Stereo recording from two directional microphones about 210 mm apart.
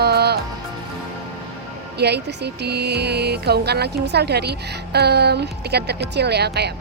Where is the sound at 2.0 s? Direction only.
50° right (ahead or behind).